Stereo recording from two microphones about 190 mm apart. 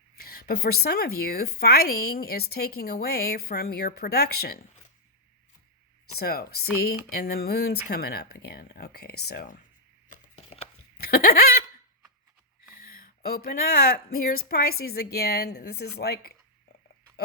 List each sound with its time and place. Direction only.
0.2 s speech: 55° left (ahead or behind)
6.1 s speech: 55° left (ahead or behind)
10.1 s chopping: 45° left (ahead or behind)
11.0 s a sound: 55° left (ahead or behind)
12.7 s speech: 45° left (ahead or behind)